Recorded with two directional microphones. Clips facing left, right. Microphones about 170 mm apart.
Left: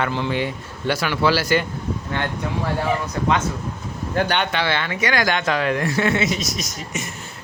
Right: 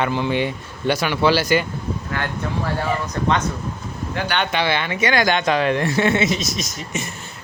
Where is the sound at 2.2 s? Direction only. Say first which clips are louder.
Left 2 dB; 20° left (ahead or behind).